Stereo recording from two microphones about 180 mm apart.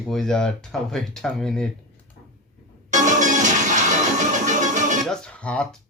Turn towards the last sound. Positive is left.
turn(degrees=5)  # may be behind; listen again after turning